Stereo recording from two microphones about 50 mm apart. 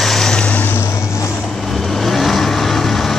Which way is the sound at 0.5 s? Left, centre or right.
Left.